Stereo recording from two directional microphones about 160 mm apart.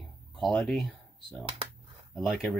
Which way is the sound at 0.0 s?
Centre (ahead or behind).